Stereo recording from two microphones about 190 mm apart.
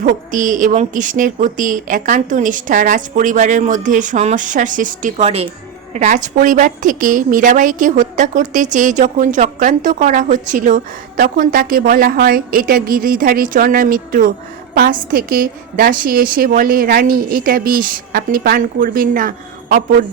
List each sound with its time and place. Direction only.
0.0 s a woman's voice: 45° right (ahead or behind)